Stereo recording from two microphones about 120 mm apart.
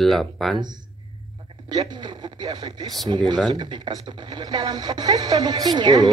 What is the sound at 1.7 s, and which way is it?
Speech, 35° right (ahead or behind).